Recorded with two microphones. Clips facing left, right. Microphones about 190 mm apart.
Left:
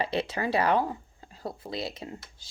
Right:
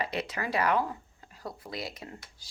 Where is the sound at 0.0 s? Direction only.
30° left (ahead or behind).